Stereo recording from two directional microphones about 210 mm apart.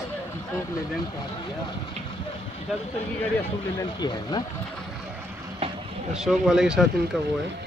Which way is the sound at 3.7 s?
20° left (ahead or behind).